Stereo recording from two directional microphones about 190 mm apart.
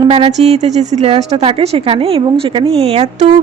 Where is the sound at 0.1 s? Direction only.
35° right (ahead or behind).